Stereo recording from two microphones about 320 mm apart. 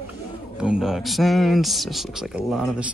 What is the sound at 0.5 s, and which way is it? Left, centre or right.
Speech, centre.